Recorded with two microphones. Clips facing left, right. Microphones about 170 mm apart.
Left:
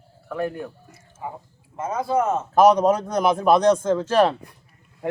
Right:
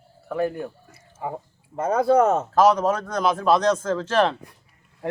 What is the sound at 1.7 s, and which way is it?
Speech, 60° right (ahead or behind).